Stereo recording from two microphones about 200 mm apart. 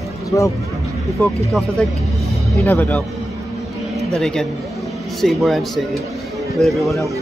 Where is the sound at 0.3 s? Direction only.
15° left (ahead or behind).